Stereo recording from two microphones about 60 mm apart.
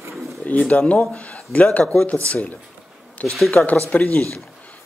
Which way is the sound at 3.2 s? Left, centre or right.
Left.